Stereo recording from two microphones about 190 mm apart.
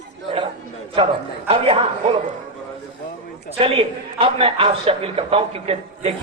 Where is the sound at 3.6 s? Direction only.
30° right (ahead or behind).